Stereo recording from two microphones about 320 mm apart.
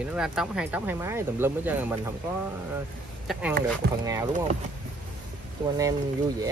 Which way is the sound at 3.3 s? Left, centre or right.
Centre.